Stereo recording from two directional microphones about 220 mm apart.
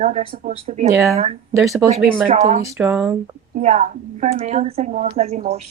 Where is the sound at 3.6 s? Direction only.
30° right (ahead or behind).